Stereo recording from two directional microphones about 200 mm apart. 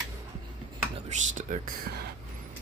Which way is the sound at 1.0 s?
40° right (ahead or behind).